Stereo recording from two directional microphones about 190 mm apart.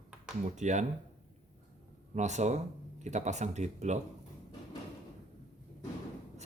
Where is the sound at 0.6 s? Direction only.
40° right (ahead or behind).